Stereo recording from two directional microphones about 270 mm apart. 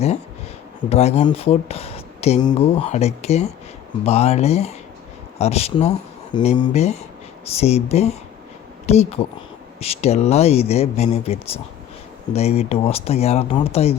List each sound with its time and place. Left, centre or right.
0.9 s speech: left